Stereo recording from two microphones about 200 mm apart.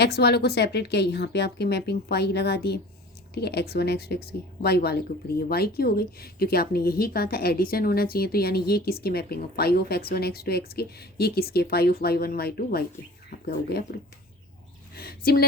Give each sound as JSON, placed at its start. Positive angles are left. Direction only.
{"t": 0.0, "sound": "a woman's voice", "side_deg": 55}
{"t": 14.9, "sound": "a woman's voice", "side_deg": 50}